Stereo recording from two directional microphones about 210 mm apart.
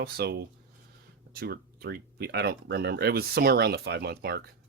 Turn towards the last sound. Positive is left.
turn(degrees=-50)  # may be behind; listen again after turning